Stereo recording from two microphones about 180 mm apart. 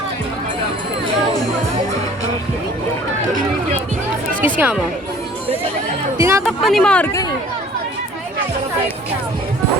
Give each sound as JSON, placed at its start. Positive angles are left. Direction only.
{"t": 4.4, "sound": "speech", "side_deg": -10}
{"t": 6.1, "sound": "speech", "side_deg": -15}
{"t": 6.6, "sound": "speech", "side_deg": 0}